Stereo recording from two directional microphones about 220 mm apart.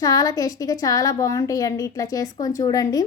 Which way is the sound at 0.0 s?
15° left (ahead or behind).